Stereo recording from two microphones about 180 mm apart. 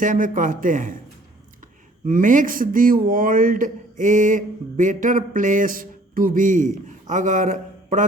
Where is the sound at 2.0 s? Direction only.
50° right (ahead or behind).